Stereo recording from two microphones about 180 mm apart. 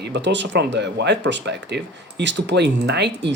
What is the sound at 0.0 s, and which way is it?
Speech, 75° right (ahead or behind).